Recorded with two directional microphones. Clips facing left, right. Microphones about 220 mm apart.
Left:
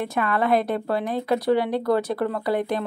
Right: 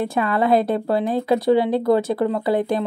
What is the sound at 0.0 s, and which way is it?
Speech, 30° right (ahead or behind).